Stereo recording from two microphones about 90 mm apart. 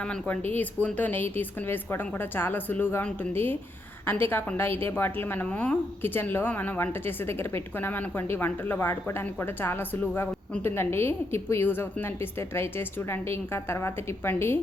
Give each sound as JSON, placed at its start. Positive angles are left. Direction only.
{"t": 0.0, "sound": "a woman's voice", "side_deg": 15}